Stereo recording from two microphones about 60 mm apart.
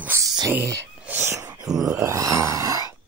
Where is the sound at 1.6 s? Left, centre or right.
Right.